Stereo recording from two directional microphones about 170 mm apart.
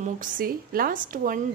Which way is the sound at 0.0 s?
55° right (ahead or behind).